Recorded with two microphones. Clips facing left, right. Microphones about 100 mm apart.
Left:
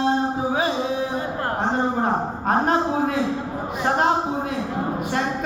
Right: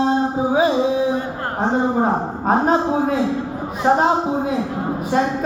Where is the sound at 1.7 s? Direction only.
5° right (ahead or behind).